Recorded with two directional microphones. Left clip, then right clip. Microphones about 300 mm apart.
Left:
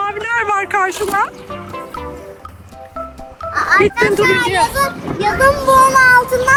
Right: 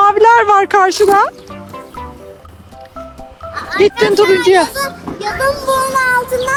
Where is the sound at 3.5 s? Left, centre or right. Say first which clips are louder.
Left 1 dB; centre.